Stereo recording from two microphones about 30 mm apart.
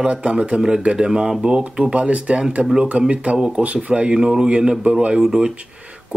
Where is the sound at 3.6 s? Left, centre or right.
Right.